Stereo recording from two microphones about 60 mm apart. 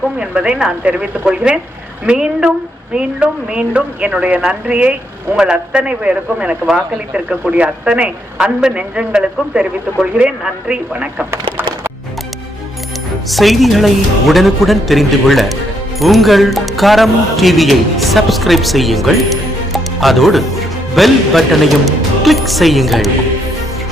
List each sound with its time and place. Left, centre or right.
0.2 s a man's voice: centre
11.3 s crack: right
13.3 s speech: centre